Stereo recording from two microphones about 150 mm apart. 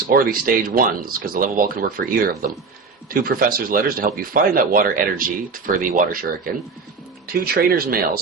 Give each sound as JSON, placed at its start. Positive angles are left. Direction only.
{"t": 0.1, "sound": "speech", "side_deg": -75}
{"t": 7.4, "sound": "speech", "side_deg": -90}